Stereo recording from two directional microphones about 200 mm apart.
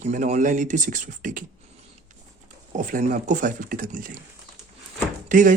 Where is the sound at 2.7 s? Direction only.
40° right (ahead or behind).